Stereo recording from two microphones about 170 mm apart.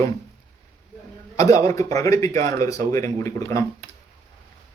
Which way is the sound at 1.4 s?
20° left (ahead or behind).